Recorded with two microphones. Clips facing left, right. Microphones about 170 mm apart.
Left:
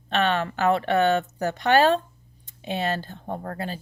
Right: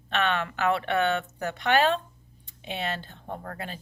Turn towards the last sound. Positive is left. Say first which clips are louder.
# left 5 dB
turn(degrees=35)  # may be behind; listen again after turning